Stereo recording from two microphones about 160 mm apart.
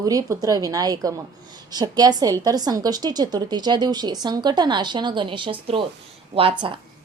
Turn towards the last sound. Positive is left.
turn(degrees=-30)  # may be behind; listen again after turning